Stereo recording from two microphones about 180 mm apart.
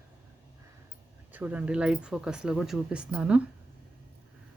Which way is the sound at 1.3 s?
10° right (ahead or behind).